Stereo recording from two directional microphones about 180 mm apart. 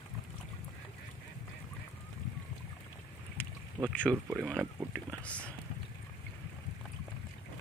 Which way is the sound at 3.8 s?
20° right (ahead or behind).